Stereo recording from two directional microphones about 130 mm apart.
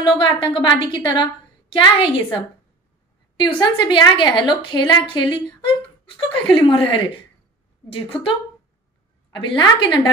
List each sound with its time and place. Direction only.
0.2 s a woman's voice: 40° left (ahead or behind)
3.3 s a woman's voice: 35° left (ahead or behind)